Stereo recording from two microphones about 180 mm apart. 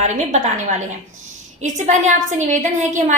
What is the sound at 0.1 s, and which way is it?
A woman's voice, 40° right (ahead or behind).